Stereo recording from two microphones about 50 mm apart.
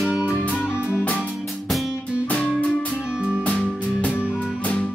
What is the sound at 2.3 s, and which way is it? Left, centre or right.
Music, left.